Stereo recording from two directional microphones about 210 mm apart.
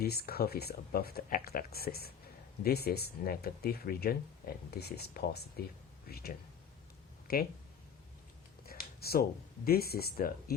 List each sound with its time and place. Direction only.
0.0 s speech: 50° left (ahead or behind)
8.6 s a sound: 45° left (ahead or behind)
9.6 s speech: 45° left (ahead or behind)